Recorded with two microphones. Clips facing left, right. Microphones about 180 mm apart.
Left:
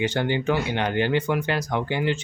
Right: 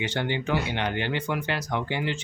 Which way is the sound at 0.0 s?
45° left (ahead or behind).